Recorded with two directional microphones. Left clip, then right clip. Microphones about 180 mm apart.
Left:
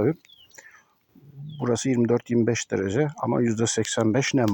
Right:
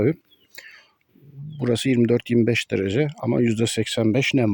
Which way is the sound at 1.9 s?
60° right (ahead or behind).